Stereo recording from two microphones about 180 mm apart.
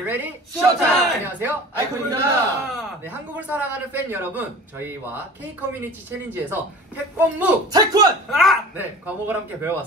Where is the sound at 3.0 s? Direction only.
10° right (ahead or behind).